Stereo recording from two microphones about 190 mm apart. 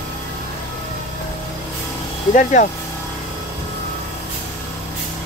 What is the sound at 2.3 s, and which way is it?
Speech, 40° left (ahead or behind).